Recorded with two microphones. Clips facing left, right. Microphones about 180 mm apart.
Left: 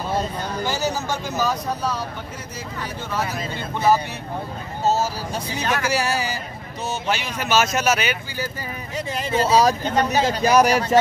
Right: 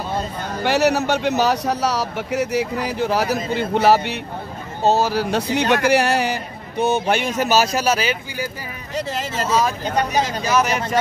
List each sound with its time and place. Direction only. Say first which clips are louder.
0.7 s speech: right 9 dB; 70° right (ahead or behind); by 8.2 s 30° right (ahead or behind)
9.4 s speech: left 3 dB; 35° left (ahead or behind)